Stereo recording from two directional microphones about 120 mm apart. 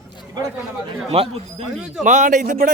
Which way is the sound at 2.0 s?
90° right.